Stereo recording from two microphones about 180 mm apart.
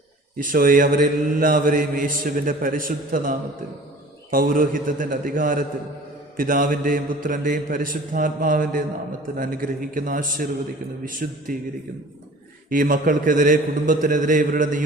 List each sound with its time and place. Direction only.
0.3 s mantra: 50° right (ahead or behind)
12.7 s mantra: 50° right (ahead or behind)